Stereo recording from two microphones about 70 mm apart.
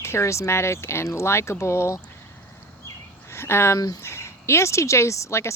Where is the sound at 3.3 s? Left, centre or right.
Left.